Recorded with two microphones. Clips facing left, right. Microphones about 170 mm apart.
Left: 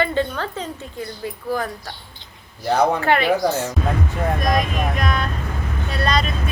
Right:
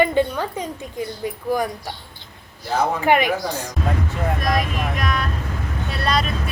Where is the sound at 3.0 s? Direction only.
15° right (ahead or behind).